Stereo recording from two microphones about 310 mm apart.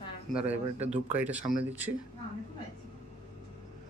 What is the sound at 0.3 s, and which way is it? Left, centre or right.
Speech, centre.